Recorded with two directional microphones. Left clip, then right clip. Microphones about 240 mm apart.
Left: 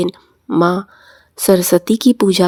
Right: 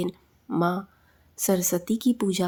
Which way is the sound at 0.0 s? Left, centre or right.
Left.